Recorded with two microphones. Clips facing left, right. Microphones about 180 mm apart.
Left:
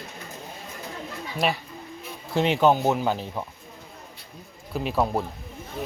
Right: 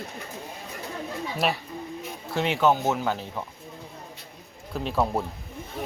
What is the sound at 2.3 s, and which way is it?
Speech, 20° left (ahead or behind).